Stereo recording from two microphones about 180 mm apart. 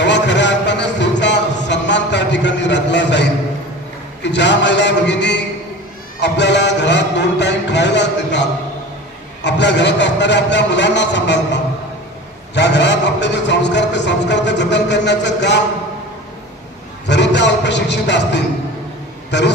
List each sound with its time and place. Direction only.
0.0 s a sound: 75° left (ahead or behind)
4.2 s a man's voice: 75° left (ahead or behind)
17.1 s a man's voice: 75° left (ahead or behind)